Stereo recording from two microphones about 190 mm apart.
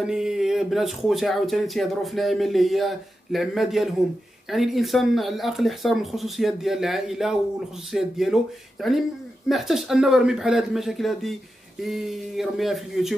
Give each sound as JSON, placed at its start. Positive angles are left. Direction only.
{"t": 0.0, "sound": "speech", "side_deg": -5}